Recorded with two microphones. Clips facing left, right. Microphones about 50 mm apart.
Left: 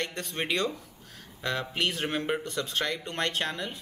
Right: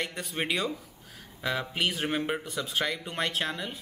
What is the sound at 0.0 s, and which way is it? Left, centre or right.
Speech, centre.